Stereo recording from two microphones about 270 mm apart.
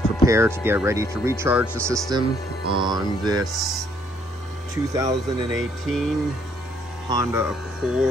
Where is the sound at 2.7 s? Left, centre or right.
Centre.